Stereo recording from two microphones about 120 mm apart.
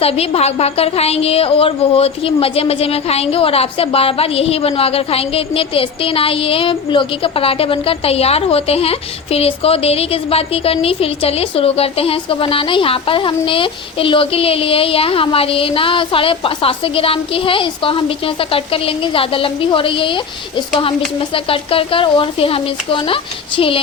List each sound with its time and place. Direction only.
0.0 s a woman's voice: 55° left (ahead or behind)